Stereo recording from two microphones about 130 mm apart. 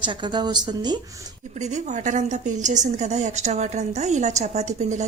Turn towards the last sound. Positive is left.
turn(degrees=-65)  # may be behind; listen again after turning